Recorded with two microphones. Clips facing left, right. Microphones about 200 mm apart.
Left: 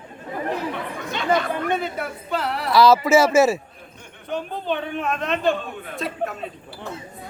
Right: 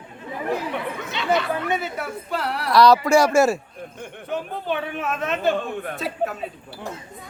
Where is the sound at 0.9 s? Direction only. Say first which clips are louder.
Left 2 dB; 45° left (ahead or behind).